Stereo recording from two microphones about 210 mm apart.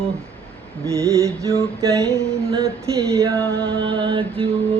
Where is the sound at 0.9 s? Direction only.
15° right (ahead or behind).